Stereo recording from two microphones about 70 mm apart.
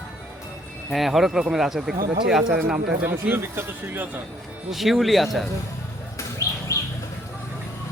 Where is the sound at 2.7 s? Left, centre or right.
Right.